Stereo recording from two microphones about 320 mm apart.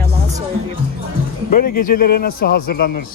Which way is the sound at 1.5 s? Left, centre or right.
Left.